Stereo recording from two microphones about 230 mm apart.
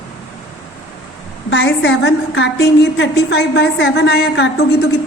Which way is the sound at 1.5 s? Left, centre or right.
Left.